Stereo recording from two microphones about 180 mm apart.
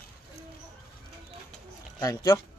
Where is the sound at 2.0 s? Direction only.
20° left (ahead or behind).